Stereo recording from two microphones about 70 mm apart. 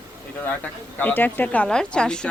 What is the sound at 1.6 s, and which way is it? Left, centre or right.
Speech, centre.